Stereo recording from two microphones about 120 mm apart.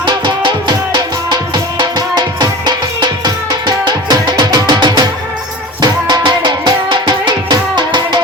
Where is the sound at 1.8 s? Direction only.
35° right (ahead or behind).